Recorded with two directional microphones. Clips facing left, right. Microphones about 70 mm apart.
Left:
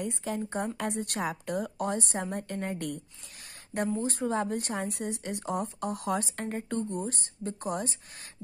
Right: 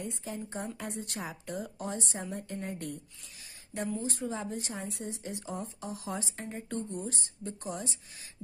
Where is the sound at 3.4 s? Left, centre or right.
Left.